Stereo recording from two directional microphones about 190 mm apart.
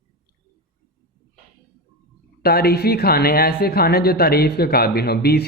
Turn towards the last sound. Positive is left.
turn(degrees=55)  # may be behind; listen again after turning